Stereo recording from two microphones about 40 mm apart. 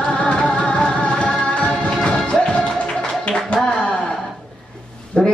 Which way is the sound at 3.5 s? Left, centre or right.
Left.